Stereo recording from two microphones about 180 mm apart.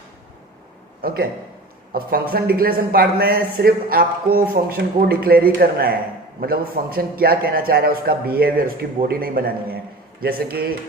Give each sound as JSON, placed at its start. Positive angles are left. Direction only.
{"t": 1.0, "sound": "speech", "side_deg": -55}